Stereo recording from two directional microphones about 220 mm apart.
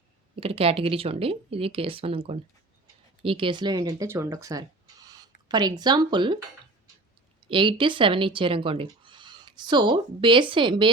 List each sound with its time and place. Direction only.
0.3 s speech: 25° right (ahead or behind)
7.4 s speech: 25° right (ahead or behind)